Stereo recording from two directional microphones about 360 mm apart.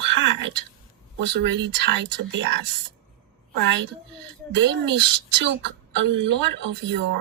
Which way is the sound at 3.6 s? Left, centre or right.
Right.